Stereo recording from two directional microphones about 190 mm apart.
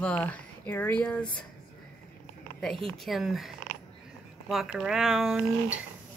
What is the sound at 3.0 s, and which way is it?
Speech, centre (ahead or behind).